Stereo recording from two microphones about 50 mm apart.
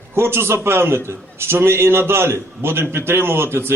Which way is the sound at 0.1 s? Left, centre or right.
Right.